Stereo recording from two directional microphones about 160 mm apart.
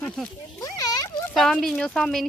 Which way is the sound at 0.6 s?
20° left (ahead or behind).